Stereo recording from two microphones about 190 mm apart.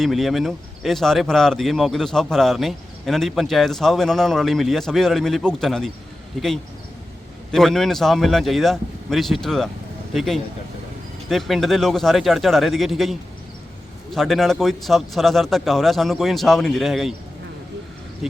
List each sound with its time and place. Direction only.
0.0 s speech: centre (ahead or behind)
7.5 s speech: centre (ahead or behind)